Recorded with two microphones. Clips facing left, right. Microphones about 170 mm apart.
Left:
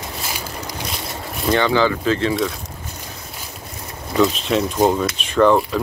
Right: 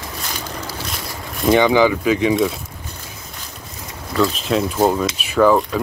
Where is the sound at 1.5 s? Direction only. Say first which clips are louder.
Right 3 dB; 15° right (ahead or behind).